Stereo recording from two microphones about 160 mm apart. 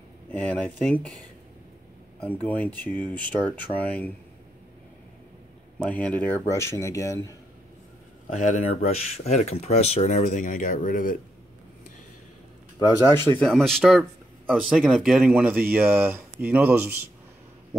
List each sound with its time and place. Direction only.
0.3 s speech: 10° left (ahead or behind)
5.8 s speech: 10° left (ahead or behind)
8.3 s speech: 50° left (ahead or behind)
12.7 s speech: 15° left (ahead or behind)
13.5 s speech: 5° left (ahead or behind)